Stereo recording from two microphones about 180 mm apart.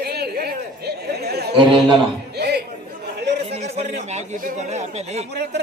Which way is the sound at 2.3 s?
65° right (ahead or behind).